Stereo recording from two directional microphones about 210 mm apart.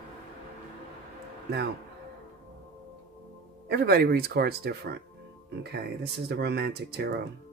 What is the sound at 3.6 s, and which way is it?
Speech, 50° right (ahead or behind).